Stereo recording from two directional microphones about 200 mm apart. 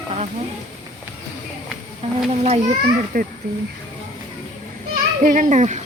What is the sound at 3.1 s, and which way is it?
Speech, 45° right (ahead or behind).